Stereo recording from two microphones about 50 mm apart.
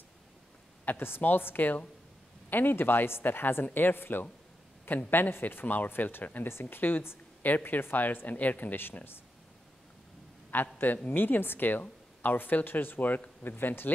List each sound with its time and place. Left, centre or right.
0.8 s speech: left
2.5 s speech: left
7.4 s speech: left
10.5 s a man's voice: left